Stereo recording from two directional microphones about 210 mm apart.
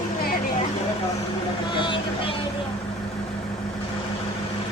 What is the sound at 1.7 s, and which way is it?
Vehicle, 25° left (ahead or behind).